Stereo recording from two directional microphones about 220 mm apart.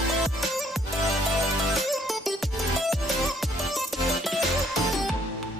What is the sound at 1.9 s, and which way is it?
Music, centre (ahead or behind).